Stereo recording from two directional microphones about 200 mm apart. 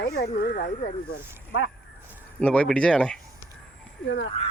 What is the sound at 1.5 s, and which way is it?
Speech, 60° left (ahead or behind).